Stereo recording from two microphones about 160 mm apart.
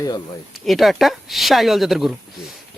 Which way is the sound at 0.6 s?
Centre (ahead or behind).